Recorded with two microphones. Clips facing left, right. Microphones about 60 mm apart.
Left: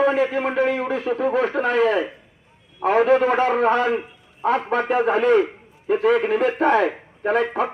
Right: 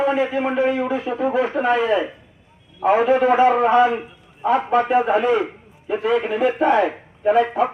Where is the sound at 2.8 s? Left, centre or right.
Left.